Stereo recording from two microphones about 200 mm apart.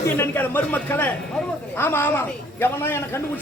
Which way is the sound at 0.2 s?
10° left (ahead or behind).